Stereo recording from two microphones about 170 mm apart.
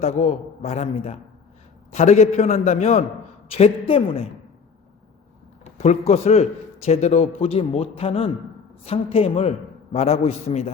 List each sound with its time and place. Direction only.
0.0 s a man's voice: 40° left (ahead or behind)
5.7 s a man's voice: 40° left (ahead or behind)